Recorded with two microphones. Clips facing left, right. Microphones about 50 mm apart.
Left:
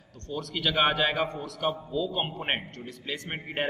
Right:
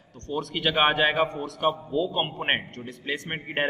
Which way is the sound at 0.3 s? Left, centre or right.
Right.